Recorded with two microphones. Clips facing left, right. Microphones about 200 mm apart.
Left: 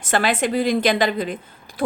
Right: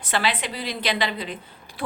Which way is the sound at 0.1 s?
50° left (ahead or behind).